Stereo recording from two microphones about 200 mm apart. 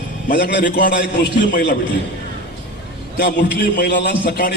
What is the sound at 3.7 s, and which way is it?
Speech, 55° left (ahead or behind).